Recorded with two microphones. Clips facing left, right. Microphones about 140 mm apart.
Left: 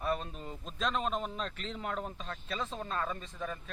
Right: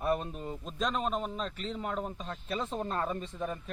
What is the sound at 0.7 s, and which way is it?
A man's voice, 5° right (ahead or behind).